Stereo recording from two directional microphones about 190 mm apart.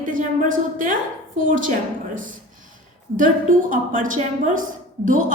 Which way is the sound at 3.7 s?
45° right (ahead or behind).